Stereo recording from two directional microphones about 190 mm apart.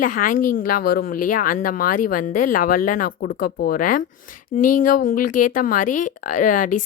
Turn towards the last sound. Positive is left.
turn(degrees=45)  # may be behind; listen again after turning